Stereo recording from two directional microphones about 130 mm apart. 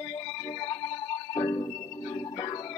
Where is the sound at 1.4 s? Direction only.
30° left (ahead or behind).